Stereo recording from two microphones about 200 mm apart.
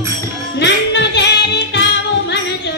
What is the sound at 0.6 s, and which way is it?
Music, 60° left (ahead or behind).